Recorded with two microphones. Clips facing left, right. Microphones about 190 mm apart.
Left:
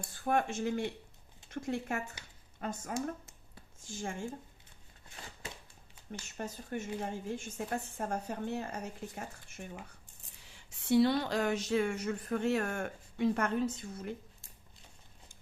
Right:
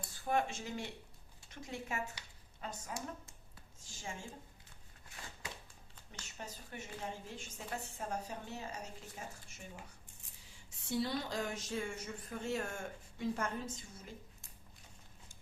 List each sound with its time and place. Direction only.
0.1 s a woman's voice: 55° left (ahead or behind)
6.2 s a woman's voice: 50° left (ahead or behind)
10.4 s a sound: 70° left (ahead or behind)